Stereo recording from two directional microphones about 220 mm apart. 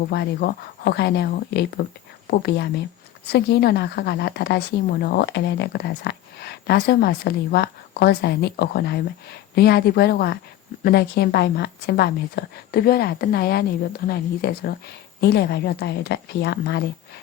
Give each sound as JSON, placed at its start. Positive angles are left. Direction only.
{"t": 0.1, "sound": "a woman's voice", "side_deg": 50}